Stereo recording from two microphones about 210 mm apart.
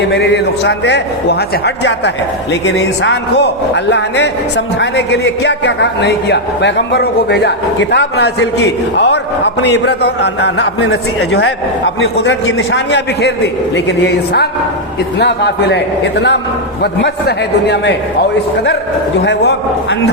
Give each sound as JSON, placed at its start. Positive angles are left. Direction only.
{"t": 0.1, "sound": "a man's voice", "side_deg": 55}
{"t": 19.2, "sound": "a man's voice", "side_deg": 55}